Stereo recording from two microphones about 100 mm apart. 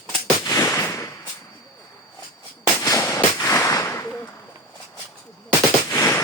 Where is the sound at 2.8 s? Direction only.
30° left (ahead or behind).